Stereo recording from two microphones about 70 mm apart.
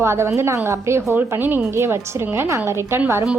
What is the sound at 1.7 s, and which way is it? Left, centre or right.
A woman's voice, right.